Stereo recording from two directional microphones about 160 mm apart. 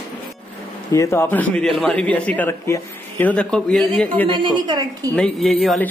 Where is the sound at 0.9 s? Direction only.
15° left (ahead or behind).